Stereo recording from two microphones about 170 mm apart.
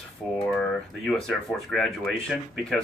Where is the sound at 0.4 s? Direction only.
5° left (ahead or behind).